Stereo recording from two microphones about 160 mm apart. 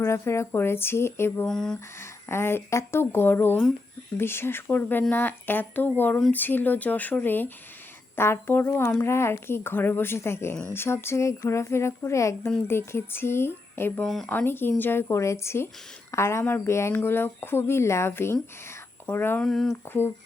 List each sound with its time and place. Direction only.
0.0 s speech: 15° left (ahead or behind)
1.5 s speech: 5° left (ahead or behind)
2.0 s speech: 15° left (ahead or behind)
14.0 s speech: centre (ahead or behind)
19.5 s speech: centre (ahead or behind)